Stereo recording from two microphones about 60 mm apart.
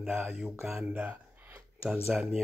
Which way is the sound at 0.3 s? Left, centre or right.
Centre.